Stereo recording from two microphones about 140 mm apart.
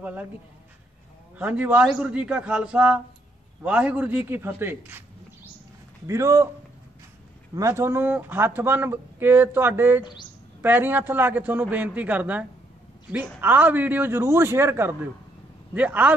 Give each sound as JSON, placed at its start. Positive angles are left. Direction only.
{"t": 0.0, "sound": "speech", "side_deg": -10}
{"t": 1.4, "sound": "a man's voice", "side_deg": -10}
{"t": 7.5, "sound": "speech", "side_deg": -20}